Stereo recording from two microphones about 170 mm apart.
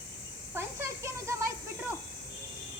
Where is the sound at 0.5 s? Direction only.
15° right (ahead or behind).